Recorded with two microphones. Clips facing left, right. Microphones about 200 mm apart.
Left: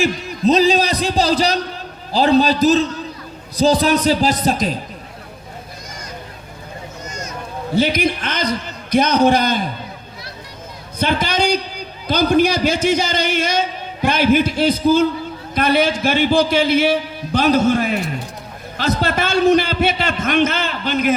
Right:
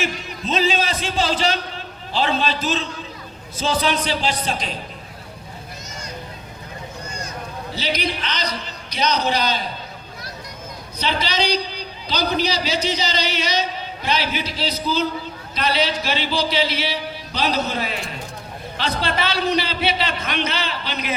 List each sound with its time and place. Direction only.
0.0 s a man's voice: 40° left (ahead or behind)
7.1 s a sound: 30° right (ahead or behind)
7.7 s a man's voice: 50° left (ahead or behind)
10.9 s a man's voice: 50° left (ahead or behind)